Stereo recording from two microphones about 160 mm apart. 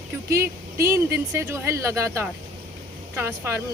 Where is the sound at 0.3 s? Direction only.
15° right (ahead or behind).